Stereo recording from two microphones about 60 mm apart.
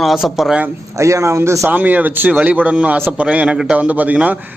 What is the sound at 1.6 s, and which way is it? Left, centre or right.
A man's voice, right.